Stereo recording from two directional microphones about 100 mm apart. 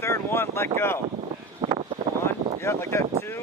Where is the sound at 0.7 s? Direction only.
25° left (ahead or behind).